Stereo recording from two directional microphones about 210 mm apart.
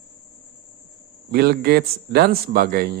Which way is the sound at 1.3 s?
50° right (ahead or behind).